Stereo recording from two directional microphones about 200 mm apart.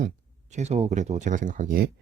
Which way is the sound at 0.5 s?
35° right (ahead or behind).